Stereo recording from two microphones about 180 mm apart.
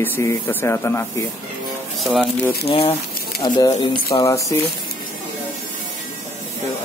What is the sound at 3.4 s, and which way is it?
A man's voice, 20° left (ahead or behind).